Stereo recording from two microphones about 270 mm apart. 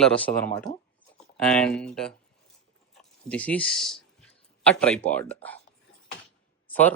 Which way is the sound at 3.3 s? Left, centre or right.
Centre.